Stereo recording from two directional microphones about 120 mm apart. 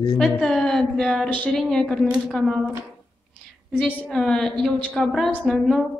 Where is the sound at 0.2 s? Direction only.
5° left (ahead or behind).